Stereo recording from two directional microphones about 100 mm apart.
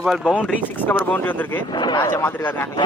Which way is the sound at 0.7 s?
15° left (ahead or behind).